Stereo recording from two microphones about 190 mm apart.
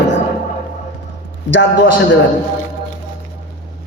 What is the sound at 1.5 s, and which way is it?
Speech, 70° left (ahead or behind).